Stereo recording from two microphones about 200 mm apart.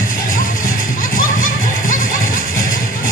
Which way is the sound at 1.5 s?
45° left (ahead or behind).